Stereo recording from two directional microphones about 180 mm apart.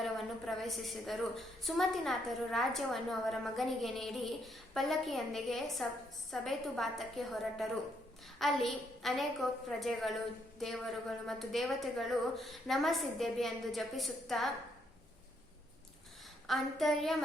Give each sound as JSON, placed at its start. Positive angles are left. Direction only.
{"t": 0.0, "sound": "a woman's voice", "side_deg": 0}
{"t": 16.5, "sound": "a woman's voice", "side_deg": 0}